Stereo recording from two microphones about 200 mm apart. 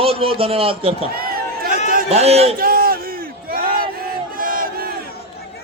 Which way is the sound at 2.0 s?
30° right (ahead or behind).